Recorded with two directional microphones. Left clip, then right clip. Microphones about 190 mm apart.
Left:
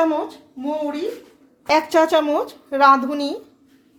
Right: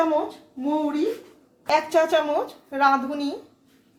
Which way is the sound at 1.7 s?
40° left (ahead or behind).